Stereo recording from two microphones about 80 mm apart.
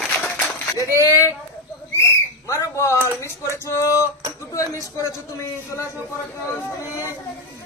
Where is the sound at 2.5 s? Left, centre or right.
Left.